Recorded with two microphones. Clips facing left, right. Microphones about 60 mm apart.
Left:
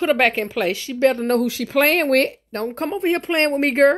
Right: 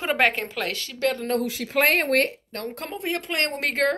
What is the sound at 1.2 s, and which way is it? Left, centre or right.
Speech, left.